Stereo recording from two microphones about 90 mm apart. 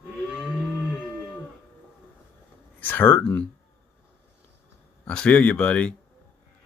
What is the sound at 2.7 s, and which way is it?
Speech, 20° left (ahead or behind).